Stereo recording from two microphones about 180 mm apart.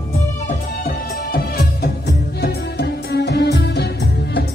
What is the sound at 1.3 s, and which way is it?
Music, 60° left (ahead or behind).